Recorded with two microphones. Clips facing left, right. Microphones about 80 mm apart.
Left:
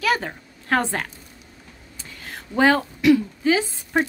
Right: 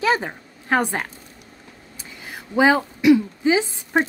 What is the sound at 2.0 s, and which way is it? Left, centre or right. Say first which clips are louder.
Speech: right 1 dB; centre.